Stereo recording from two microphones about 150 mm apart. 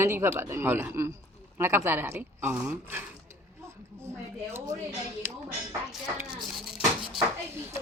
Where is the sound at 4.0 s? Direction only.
15° right (ahead or behind).